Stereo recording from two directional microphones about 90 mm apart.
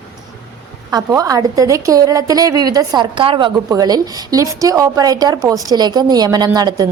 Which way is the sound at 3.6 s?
45° right (ahead or behind).